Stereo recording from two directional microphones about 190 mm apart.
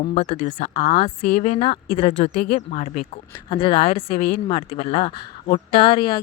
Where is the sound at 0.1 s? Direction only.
35° left (ahead or behind).